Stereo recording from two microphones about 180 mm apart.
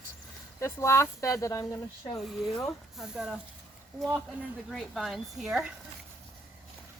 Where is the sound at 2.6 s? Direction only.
Centre (ahead or behind).